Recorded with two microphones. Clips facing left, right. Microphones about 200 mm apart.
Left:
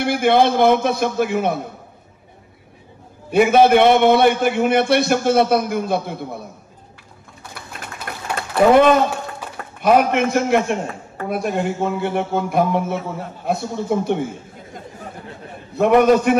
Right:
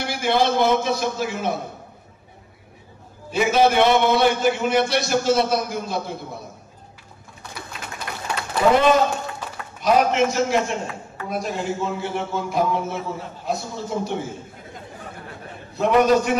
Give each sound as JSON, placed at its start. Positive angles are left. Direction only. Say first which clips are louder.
{"t": 0.0, "sound": "a man's voice", "louder": "left 6 dB", "side_deg": 55}
{"t": 3.3, "sound": "a man's voice", "louder": "left 5 dB", "side_deg": 55}
{"t": 8.3, "sound": "a sound", "louder": "left 4 dB", "side_deg": 55}
{"t": 9.8, "sound": "a man's voice", "louder": "left 3 dB", "side_deg": 55}
{"t": 15.7, "sound": "a man's voice", "louder": "left 4 dB", "side_deg": 55}